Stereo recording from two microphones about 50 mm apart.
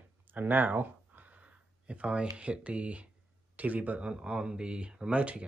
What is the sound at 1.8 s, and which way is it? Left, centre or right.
Speech, right.